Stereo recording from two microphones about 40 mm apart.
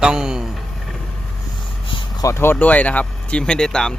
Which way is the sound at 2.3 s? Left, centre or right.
Left.